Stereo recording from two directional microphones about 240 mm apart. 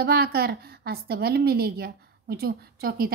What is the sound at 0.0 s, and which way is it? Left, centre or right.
A woman's voice, right.